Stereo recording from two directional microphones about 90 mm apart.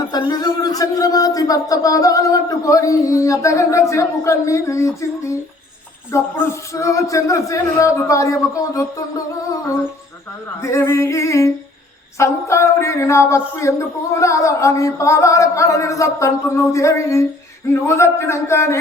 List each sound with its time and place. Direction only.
0.1 s speech: 50° left (ahead or behind)
10.6 s speech: 30° left (ahead or behind)